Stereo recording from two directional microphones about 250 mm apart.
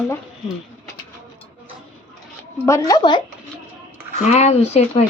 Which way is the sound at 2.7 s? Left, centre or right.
Centre.